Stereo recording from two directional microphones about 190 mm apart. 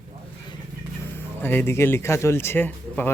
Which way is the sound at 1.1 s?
10° left (ahead or behind).